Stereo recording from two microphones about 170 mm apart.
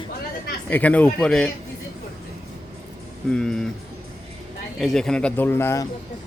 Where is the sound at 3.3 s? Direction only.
5° left (ahead or behind).